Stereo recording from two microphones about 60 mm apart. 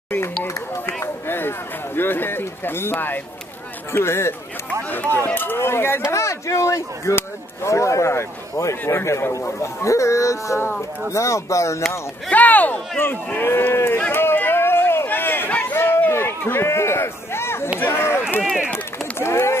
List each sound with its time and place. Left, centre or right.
1.0 s a sound: left
2.0 s a man's voice: left
4.8 s speech: left
6.1 s a man's voice: left
12.3 s speech: left
15.7 s a sound: left
17.7 s run: left